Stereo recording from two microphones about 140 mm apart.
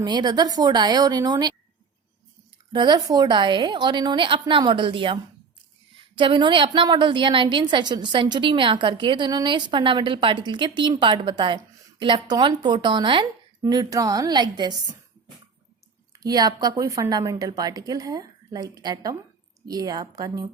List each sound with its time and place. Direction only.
0.0 s a woman's voice: 30° right (ahead or behind)
2.7 s a woman's voice: 30° right (ahead or behind)
16.1 s a woman's voice: 25° right (ahead or behind)